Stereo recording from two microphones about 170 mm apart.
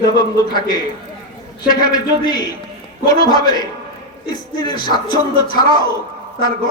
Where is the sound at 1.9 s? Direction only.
25° left (ahead or behind).